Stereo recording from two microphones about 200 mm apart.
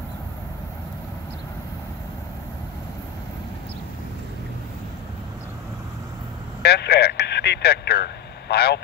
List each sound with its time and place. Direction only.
6.6 s speech: 55° left (ahead or behind)